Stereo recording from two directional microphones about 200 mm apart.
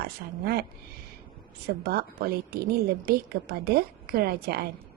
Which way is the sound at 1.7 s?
50° right (ahead or behind).